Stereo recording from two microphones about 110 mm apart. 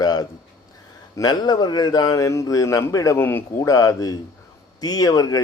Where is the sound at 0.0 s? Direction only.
35° left (ahead or behind).